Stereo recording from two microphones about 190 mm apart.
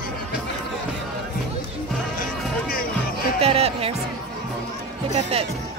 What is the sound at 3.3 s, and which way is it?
Music, 30° right (ahead or behind).